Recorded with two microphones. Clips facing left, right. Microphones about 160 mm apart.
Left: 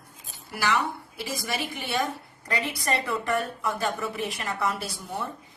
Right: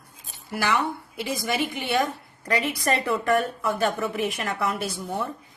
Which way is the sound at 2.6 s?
55° right (ahead or behind).